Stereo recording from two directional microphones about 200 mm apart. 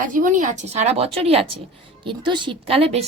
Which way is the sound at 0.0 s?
40° right (ahead or behind).